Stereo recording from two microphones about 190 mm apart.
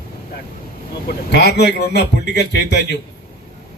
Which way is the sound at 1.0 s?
60° left (ahead or behind).